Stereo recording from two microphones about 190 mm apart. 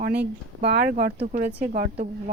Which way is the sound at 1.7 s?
40° right (ahead or behind).